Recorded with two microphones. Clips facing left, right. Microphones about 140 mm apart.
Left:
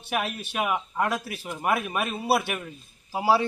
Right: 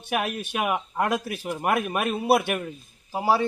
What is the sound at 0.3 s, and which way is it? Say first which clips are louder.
Speech: right 1 dB; 5° right (ahead or behind).